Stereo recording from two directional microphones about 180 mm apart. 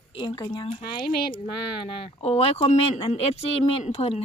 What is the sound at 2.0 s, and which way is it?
Speech, 35° left (ahead or behind).